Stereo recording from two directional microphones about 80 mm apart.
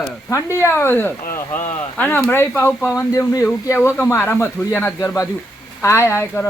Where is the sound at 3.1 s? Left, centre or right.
Left.